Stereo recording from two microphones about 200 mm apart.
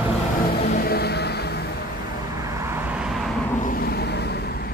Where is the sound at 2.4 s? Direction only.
15° right (ahead or behind).